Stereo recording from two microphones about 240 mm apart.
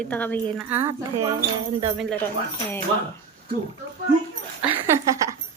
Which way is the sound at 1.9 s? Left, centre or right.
Centre.